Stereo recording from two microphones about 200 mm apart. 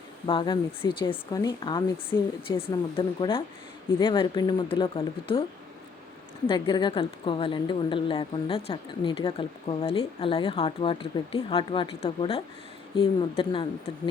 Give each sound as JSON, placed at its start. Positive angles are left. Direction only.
{"t": 0.3, "sound": "a woman's voice", "side_deg": 25}
{"t": 6.5, "sound": "a woman's voice", "side_deg": 25}